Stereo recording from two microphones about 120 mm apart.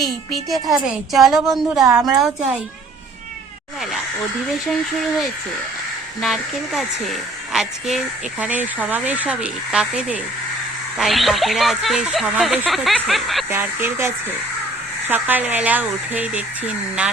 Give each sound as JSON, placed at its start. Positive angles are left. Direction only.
{"t": 0.0, "sound": "a woman's voice", "side_deg": 0}
{"t": 6.1, "sound": "a woman's voice", "side_deg": 0}
{"t": 8.4, "sound": "a woman's voice", "side_deg": -15}
{"t": 13.5, "sound": "speech", "side_deg": -20}